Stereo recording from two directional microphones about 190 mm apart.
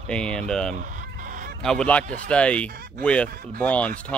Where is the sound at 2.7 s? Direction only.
55° right (ahead or behind).